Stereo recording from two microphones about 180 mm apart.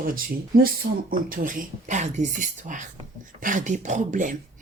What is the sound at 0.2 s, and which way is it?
Speech, 55° right (ahead or behind).